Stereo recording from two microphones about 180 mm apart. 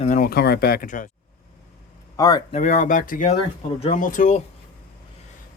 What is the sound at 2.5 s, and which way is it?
Speech, 40° left (ahead or behind).